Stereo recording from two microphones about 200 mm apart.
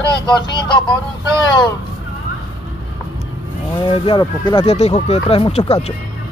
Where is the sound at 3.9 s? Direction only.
25° left (ahead or behind).